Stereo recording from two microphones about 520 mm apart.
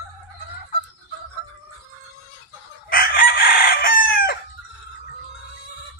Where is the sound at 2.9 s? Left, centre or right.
Centre.